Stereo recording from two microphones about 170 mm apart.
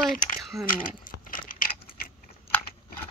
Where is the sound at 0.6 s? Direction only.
55° left (ahead or behind).